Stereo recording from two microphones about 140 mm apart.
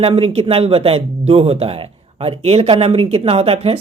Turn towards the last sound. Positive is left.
turn(degrees=-45)  # may be behind; listen again after turning